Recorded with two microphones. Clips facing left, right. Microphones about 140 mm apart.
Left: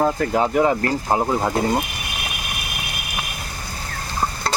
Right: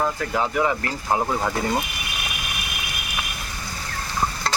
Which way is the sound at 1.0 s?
25° left (ahead or behind).